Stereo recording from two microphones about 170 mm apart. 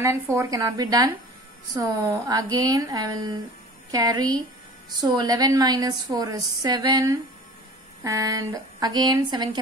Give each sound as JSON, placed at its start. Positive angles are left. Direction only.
{"t": 0.0, "sound": "a woman's voice", "side_deg": -15}